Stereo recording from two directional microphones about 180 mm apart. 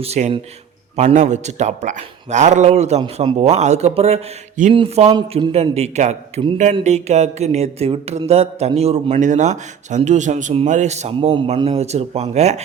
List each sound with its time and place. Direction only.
0.0 s speech: 35° right (ahead or behind)